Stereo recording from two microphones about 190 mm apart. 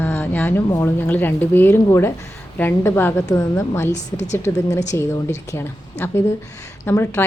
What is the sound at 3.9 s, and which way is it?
Speech, 35° left (ahead or behind).